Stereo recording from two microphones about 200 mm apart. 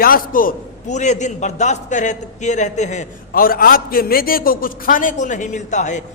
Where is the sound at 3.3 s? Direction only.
45° left (ahead or behind).